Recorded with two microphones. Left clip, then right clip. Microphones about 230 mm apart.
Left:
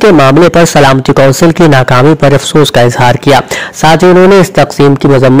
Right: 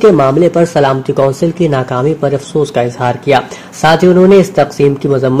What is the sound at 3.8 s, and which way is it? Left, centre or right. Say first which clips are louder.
A man's voice: left 4 dB; left.